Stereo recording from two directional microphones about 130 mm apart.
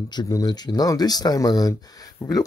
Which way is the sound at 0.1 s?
30° left (ahead or behind).